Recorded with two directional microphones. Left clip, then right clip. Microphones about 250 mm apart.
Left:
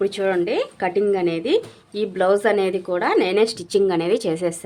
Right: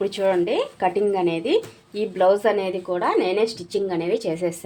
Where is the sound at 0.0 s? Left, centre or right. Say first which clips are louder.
Even; centre.